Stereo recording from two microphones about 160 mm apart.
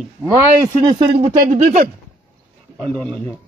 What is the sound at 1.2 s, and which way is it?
Speech, 50° right (ahead or behind).